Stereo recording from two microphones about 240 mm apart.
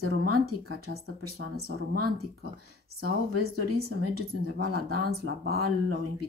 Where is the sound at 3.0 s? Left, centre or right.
Right.